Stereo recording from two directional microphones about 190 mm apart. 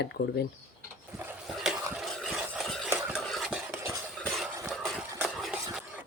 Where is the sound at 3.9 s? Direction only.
Centre (ahead or behind).